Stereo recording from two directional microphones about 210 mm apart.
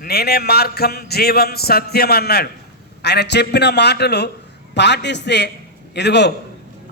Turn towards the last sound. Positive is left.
turn(degrees=55)  # may be behind; listen again after turning